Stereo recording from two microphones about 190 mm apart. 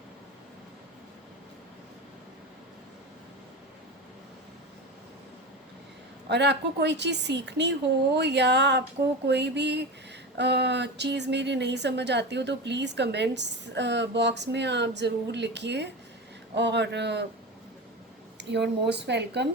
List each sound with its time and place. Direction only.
6.2 s speech: 65° right (ahead or behind)
18.3 s speech: 65° right (ahead or behind)